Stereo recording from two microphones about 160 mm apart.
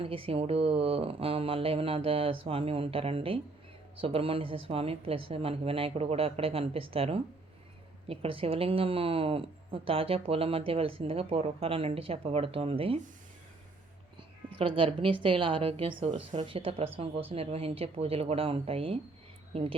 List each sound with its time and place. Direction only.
0.0 s a woman's voice: 35° right (ahead or behind)
14.6 s a woman's voice: 35° right (ahead or behind)